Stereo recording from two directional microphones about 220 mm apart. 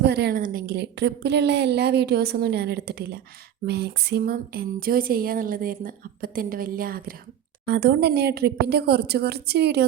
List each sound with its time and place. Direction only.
0.0 s a woman's voice: 50° right (ahead or behind)
3.7 s a sound: 50° right (ahead or behind)
7.6 s a woman's voice: 45° right (ahead or behind)